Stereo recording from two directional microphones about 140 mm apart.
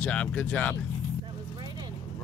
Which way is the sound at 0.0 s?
10° left (ahead or behind).